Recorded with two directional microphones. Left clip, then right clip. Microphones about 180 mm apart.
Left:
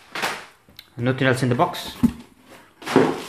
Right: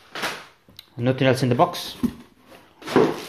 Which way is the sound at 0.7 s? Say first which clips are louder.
Right 1 dB; 10° right (ahead or behind).